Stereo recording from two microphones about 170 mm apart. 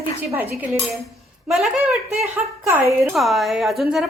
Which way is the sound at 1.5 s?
Centre (ahead or behind).